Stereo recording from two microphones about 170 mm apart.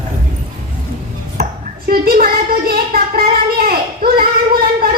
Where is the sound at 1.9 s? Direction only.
60° right (ahead or behind).